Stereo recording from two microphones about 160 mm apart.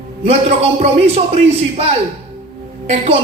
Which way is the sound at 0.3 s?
40° right (ahead or behind).